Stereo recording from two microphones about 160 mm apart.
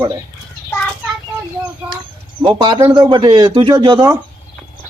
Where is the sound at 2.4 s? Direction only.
30° right (ahead or behind).